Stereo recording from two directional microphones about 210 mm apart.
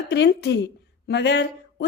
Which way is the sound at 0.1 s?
55° left (ahead or behind).